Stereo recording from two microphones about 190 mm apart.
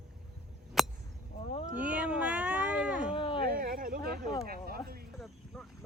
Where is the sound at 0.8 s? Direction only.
Centre (ahead or behind).